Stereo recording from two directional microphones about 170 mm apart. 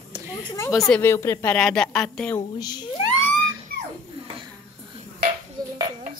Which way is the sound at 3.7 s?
60° left (ahead or behind).